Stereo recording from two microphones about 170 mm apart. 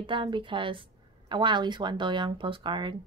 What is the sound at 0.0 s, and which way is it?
Speech, 30° right (ahead or behind).